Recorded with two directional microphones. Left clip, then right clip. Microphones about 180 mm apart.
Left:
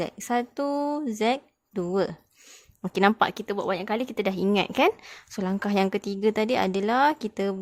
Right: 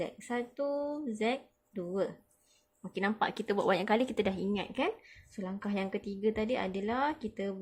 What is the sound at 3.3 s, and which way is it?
Speech, 20° left (ahead or behind).